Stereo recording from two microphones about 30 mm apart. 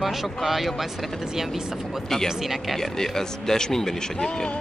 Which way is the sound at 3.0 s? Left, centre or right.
Centre.